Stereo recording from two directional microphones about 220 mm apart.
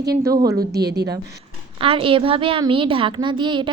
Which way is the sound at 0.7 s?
50° right (ahead or behind).